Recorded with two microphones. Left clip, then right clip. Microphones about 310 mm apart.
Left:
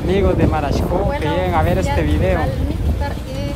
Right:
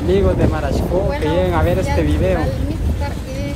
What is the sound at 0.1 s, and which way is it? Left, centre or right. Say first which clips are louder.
Speech: even; centre.